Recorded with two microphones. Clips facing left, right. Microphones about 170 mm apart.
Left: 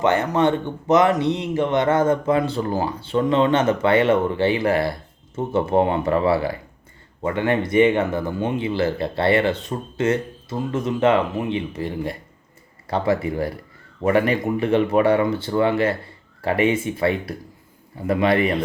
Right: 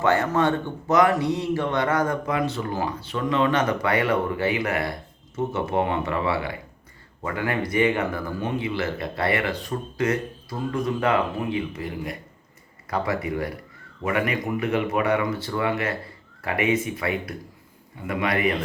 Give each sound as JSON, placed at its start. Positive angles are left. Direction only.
{"t": 0.0, "sound": "a man's voice", "side_deg": 20}